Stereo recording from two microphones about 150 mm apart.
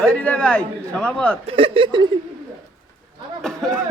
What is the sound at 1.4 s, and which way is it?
Speech, 40° right (ahead or behind).